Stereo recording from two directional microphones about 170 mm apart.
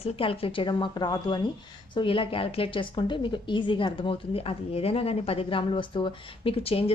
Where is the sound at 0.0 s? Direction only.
35° left (ahead or behind).